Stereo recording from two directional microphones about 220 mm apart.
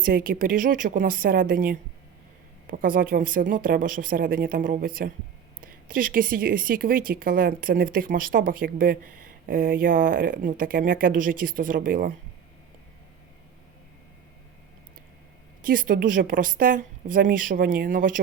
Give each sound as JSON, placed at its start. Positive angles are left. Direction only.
{"t": 0.0, "sound": "speech", "side_deg": -40}
{"t": 15.6, "sound": "speech", "side_deg": -40}